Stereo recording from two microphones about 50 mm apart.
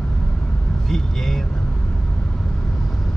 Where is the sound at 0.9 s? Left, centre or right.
Centre.